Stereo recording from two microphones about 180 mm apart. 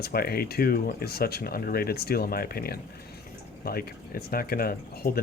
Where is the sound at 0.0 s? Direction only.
60° left (ahead or behind).